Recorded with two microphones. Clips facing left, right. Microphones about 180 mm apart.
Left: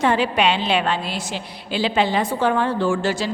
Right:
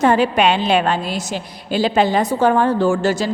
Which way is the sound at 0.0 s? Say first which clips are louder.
Right 4 dB; 45° right (ahead or behind).